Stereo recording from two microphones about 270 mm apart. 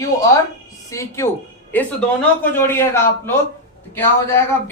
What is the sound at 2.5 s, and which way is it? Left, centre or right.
Speech, centre.